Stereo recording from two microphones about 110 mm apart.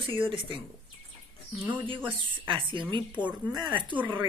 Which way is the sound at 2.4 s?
45° right (ahead or behind).